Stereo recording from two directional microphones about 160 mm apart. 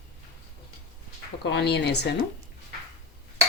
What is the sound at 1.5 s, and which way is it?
Speech, 90° left.